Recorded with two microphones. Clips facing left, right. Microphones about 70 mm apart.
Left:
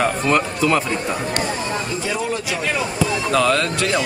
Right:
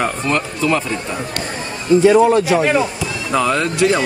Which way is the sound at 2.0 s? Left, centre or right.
Right.